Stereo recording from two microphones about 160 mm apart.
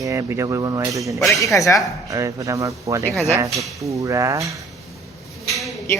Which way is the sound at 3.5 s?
Centre (ahead or behind).